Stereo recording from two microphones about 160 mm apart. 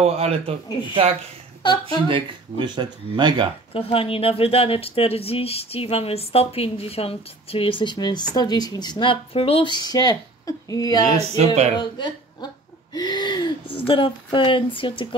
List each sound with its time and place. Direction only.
0.0 s speech: 40° right (ahead or behind)
1.6 s a woman's voice: 25° left (ahead or behind)
2.0 s speech: 30° right (ahead or behind)
3.7 s speech: 35° left (ahead or behind)
11.1 s speech: 45° right (ahead or behind)
11.8 s a woman's voice: 25° left (ahead or behind)